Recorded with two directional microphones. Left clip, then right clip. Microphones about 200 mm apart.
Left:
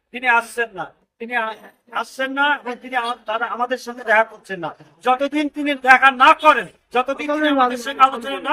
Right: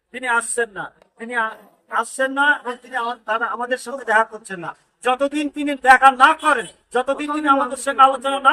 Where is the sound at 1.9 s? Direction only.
5° right (ahead or behind).